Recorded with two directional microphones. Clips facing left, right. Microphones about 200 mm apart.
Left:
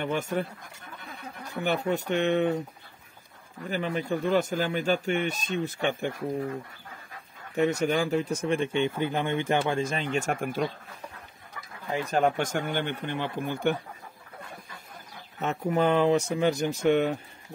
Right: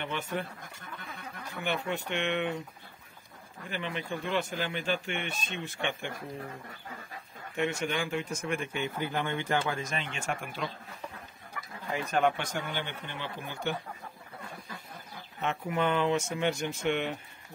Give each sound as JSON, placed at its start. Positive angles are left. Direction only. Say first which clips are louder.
{"t": 0.0, "sound": "speech", "louder": "left 6 dB", "side_deg": 45}
{"t": 1.6, "sound": "a man's voice", "louder": "left 6 dB", "side_deg": 40}
{"t": 3.6, "sound": "a man's voice", "louder": "left 7 dB", "side_deg": 40}
{"t": 7.5, "sound": "a man's voice", "louder": "left 7 dB", "side_deg": 40}
{"t": 11.9, "sound": "speech", "louder": "left 3 dB", "side_deg": 35}
{"t": 15.4, "sound": "a man's voice", "louder": "left 5 dB", "side_deg": 40}